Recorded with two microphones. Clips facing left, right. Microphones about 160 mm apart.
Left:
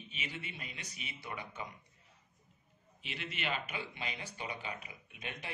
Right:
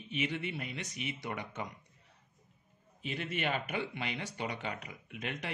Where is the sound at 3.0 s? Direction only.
50° right (ahead or behind).